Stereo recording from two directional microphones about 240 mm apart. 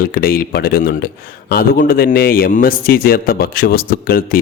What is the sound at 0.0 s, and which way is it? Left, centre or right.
Speech, left.